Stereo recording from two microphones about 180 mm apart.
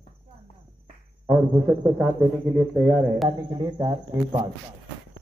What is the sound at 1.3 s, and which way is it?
Speech, 5° right (ahead or behind).